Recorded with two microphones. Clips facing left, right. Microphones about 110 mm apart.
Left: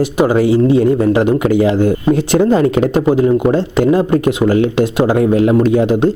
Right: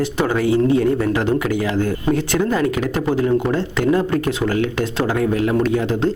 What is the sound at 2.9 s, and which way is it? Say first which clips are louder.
Speech: left 4 dB; 15° left (ahead or behind).